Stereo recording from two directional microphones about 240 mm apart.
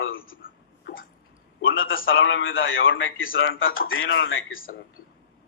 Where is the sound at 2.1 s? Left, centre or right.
Left.